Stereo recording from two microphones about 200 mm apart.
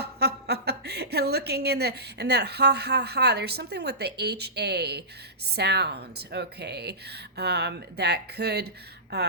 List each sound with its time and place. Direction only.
0.0 s a woman's voice: 55° right (ahead or behind)